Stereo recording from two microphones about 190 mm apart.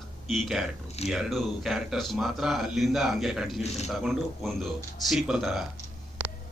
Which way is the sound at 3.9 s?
Centre (ahead or behind).